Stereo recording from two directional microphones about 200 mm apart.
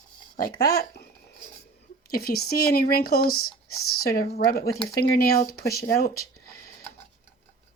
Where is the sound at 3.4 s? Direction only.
90° left.